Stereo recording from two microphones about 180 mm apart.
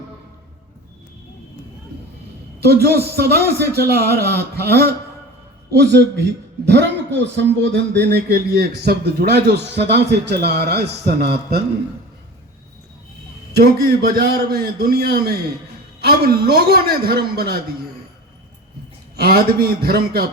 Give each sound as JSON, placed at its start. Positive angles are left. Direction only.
{"t": 2.6, "sound": "a man's voice", "side_deg": -65}
{"t": 8.1, "sound": "a man's voice", "side_deg": -60}
{"t": 13.6, "sound": "a man's voice", "side_deg": -60}
{"t": 19.1, "sound": "a man's voice", "side_deg": -60}